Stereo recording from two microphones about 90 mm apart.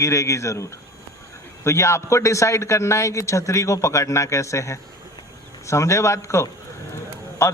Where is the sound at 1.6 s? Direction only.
30° left (ahead or behind).